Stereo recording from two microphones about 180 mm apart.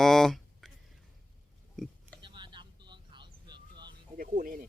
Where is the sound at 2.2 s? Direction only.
25° right (ahead or behind).